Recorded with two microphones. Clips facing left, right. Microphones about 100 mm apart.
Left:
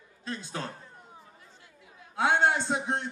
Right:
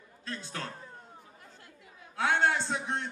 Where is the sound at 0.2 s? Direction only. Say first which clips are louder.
Left 3 dB; 20° left (ahead or behind).